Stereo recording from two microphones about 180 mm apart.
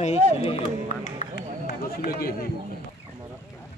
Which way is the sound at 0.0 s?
35° left (ahead or behind).